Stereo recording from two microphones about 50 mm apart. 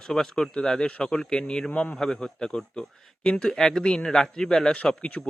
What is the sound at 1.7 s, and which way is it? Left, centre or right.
Speech, left.